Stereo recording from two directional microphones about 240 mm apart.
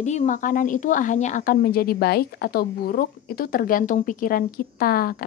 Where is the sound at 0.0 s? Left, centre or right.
Left.